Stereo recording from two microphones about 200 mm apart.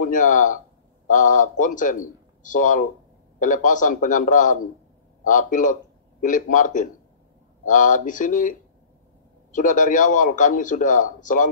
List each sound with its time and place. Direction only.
0.0 s a man's voice: 40° left (ahead or behind)